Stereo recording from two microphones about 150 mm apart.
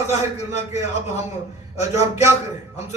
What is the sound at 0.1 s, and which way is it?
A man's voice, 50° left (ahead or behind).